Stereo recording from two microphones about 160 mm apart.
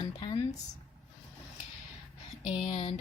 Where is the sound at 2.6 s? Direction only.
40° left (ahead or behind).